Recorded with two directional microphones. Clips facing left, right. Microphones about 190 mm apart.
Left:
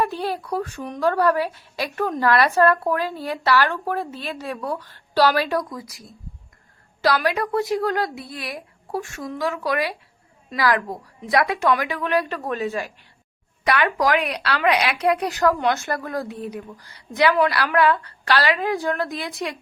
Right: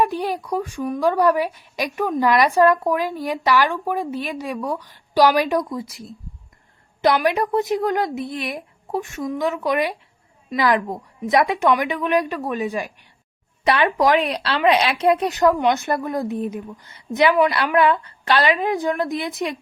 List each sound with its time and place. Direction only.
0.0 s a woman's voice: 15° right (ahead or behind)